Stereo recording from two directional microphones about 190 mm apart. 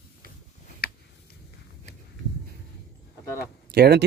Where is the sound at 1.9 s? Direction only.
55° left (ahead or behind).